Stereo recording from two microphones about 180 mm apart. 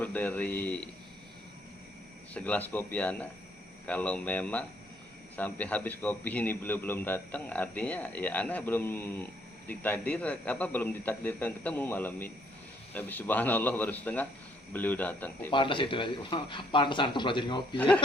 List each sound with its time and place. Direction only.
0.0 s a man's voice: 10° left (ahead or behind)
2.3 s a man's voice: 10° left (ahead or behind)
15.5 s speech: 25° left (ahead or behind)
17.7 s a man's voice: 5° left (ahead or behind)